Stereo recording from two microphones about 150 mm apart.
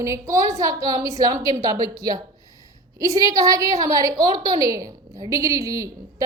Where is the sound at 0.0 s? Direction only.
20° right (ahead or behind).